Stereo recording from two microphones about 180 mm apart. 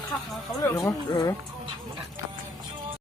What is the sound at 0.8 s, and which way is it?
Speech, 20° left (ahead or behind).